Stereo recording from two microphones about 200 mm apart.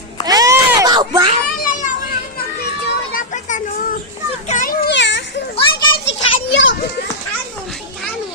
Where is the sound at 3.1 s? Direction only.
40° left (ahead or behind).